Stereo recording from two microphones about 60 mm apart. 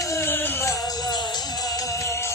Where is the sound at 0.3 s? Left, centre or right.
Left.